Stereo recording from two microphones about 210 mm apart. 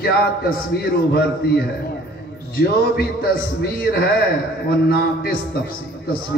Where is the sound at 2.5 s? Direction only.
45° left (ahead or behind).